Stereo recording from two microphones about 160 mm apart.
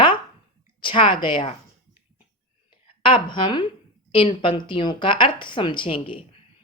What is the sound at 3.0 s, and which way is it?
A woman's voice, 30° left (ahead or behind).